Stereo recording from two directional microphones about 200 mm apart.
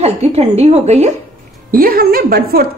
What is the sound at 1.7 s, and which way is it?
Speech, 45° right (ahead or behind).